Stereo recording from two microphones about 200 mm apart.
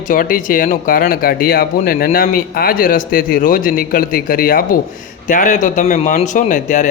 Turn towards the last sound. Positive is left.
turn(degrees=40)  # may be behind; listen again after turning